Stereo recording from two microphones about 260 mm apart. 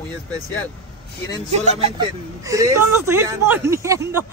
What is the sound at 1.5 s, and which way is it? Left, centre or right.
Speech, right.